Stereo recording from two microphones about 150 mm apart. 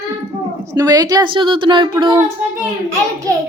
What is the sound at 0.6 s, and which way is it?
A woman's voice, 25° right (ahead or behind).